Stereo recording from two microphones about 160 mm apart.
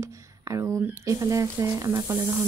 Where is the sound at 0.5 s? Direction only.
20° right (ahead or behind).